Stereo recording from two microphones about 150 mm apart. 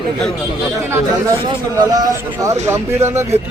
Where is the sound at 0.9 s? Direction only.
20° right (ahead or behind).